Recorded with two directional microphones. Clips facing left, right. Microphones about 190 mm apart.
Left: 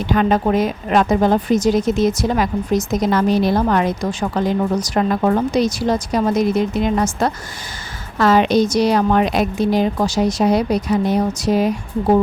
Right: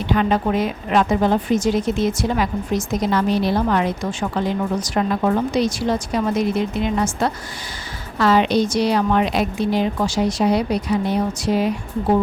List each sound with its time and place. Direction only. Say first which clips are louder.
0.1 s a woman's voice: left 3 dB; 45° left (ahead or behind)